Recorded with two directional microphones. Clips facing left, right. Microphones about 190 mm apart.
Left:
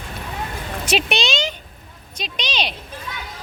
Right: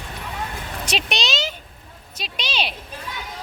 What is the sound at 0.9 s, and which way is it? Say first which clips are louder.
Speech: left 5 dB; 5° left (ahead or behind).